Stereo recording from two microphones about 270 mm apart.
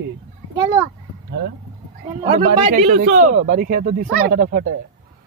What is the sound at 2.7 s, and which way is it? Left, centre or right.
Speech, right.